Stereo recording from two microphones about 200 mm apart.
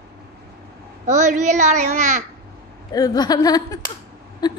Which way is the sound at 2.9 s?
20° left (ahead or behind).